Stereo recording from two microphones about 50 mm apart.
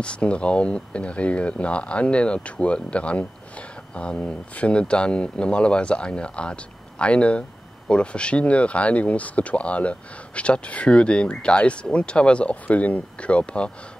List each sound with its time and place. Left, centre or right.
0.0 s speech: left